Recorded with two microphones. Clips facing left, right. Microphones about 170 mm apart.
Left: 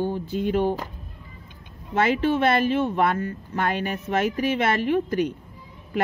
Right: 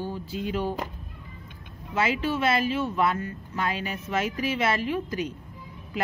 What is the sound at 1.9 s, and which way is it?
Speech, 50° left (ahead or behind).